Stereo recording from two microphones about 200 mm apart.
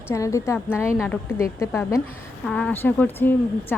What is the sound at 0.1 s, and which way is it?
A woman's voice, 15° left (ahead or behind).